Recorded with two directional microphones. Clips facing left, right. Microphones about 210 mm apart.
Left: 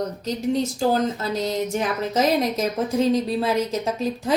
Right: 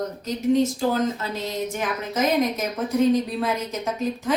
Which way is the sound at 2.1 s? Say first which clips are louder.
Left 1 dB; 30° left (ahead or behind).